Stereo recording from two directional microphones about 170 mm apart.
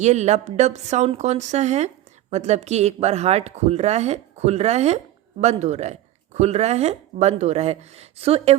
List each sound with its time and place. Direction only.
0.0 s a woman's voice: 40° right (ahead or behind)